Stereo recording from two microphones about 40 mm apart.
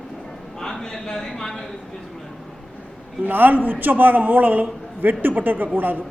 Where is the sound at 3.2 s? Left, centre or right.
Right.